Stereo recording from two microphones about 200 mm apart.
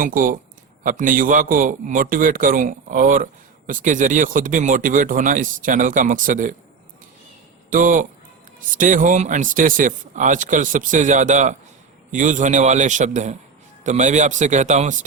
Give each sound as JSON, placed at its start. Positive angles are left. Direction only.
{"t": 0.0, "sound": "a man's voice", "side_deg": -45}
{"t": 7.7, "sound": "speech", "side_deg": -40}